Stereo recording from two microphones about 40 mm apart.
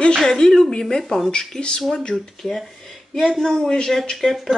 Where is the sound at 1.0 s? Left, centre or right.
Centre.